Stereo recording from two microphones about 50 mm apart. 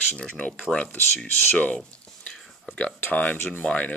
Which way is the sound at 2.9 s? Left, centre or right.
Left.